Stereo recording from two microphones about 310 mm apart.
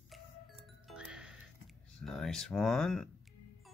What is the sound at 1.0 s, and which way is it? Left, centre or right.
Music, centre.